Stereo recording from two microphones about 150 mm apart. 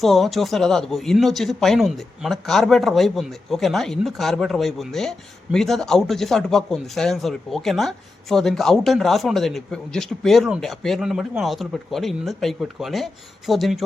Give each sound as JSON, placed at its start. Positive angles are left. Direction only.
{"t": 0.0, "sound": "speech", "side_deg": 0}